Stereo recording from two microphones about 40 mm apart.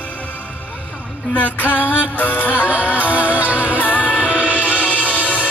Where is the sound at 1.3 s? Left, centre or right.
Left.